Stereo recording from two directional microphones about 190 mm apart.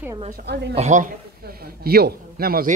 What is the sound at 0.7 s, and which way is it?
Speech, 40° right (ahead or behind).